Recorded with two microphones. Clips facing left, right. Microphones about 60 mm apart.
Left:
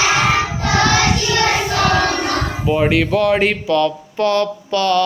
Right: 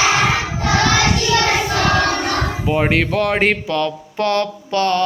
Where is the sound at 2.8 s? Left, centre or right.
Right.